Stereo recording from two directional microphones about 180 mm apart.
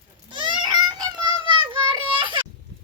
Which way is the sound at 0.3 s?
25° right (ahead or behind).